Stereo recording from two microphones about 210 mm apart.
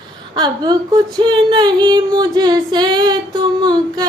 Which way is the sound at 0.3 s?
20° right (ahead or behind).